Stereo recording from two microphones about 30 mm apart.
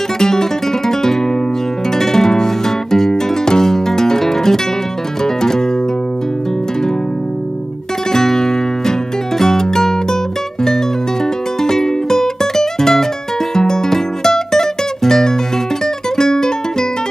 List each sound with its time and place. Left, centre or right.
0.2 s music: centre
8.1 s music: centre
11.6 s music: centre